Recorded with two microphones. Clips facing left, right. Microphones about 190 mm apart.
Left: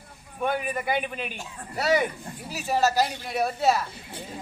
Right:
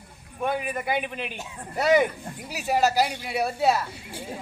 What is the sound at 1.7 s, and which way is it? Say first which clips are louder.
A woman's voice: right 3 dB; 20° right (ahead or behind).